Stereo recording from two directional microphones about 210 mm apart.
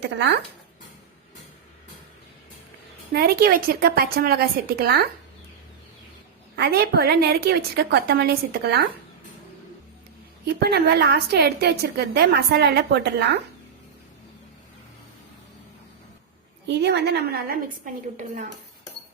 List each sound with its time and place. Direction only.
0.0 s speech: 55° right (ahead or behind)
3.1 s a woman's voice: 45° right (ahead or behind)
6.6 s a woman's voice: 50° right (ahead or behind)
10.4 s a woman's voice: 50° right (ahead or behind)
16.6 s a woman's voice: 55° right (ahead or behind); by 18.5 s 35° right (ahead or behind)